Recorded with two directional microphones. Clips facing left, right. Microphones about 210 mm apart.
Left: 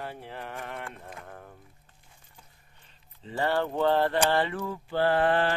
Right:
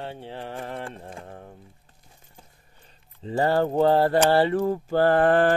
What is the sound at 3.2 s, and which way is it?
Mantra, 40° right (ahead or behind).